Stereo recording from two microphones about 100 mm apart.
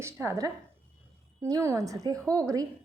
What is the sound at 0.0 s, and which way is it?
A woman's voice, 25° right (ahead or behind).